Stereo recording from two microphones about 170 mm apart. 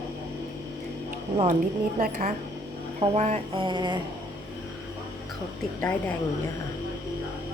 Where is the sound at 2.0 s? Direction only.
60° right (ahead or behind).